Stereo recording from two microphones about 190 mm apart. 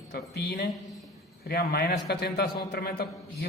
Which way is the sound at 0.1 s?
60° left (ahead or behind).